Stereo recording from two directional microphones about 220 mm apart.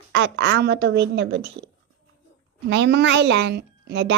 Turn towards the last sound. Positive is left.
turn(degrees=-55)  # may be behind; listen again after turning